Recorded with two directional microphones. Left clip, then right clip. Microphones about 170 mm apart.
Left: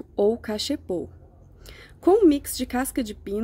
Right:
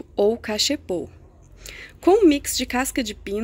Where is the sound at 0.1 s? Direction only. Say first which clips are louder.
Right 2 dB; 20° left (ahead or behind).